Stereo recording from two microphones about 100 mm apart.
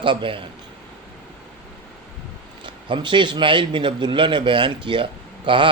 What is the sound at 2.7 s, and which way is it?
A man's voice, 55° right (ahead or behind).